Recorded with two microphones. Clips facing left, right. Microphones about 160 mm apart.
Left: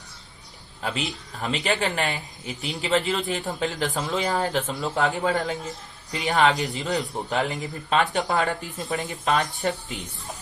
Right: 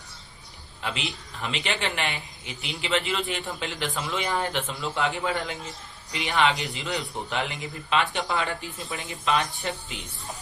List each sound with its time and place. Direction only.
0.8 s a man's voice: 40° left (ahead or behind)